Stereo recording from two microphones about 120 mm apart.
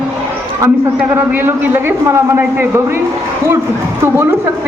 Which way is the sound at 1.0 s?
15° right (ahead or behind).